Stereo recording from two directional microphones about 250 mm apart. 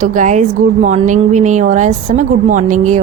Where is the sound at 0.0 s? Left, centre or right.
Right.